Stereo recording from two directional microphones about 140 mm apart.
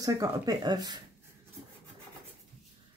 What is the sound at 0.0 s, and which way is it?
Speech, 25° right (ahead or behind).